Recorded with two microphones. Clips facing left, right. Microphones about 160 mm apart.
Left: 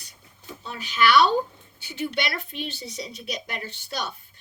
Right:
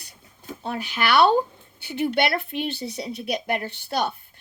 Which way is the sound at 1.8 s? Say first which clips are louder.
Right 6 dB; 60° right (ahead or behind).